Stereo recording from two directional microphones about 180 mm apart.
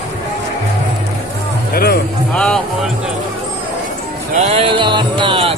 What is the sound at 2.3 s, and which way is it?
Speech, 5° left (ahead or behind).